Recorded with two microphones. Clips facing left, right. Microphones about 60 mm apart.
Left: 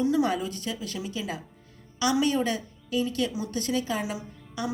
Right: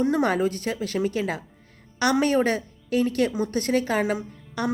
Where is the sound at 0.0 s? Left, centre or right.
Right.